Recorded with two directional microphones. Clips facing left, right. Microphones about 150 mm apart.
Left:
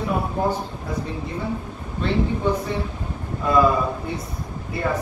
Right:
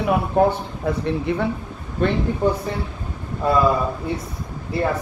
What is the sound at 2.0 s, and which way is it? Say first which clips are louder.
Speech: right 4 dB; 55° right (ahead or behind).